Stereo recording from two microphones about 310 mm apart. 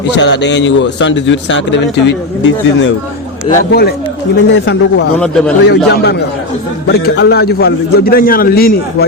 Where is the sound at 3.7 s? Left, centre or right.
Left.